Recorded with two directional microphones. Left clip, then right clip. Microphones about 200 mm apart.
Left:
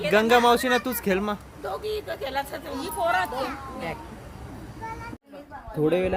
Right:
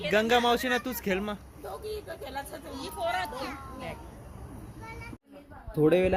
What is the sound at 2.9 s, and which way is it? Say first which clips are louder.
Speech: left 7 dB; 35° left (ahead or behind).